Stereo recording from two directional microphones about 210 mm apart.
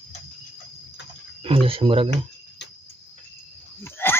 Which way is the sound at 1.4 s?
25° right (ahead or behind).